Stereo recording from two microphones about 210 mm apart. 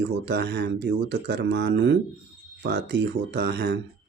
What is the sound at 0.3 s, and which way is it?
Speech, 50° right (ahead or behind).